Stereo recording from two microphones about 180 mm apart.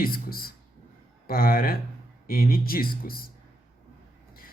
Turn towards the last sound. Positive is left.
turn(degrees=55)  # may be behind; listen again after turning